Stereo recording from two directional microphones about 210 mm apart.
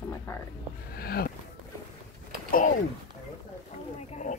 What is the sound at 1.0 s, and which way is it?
Speech, 45° left (ahead or behind).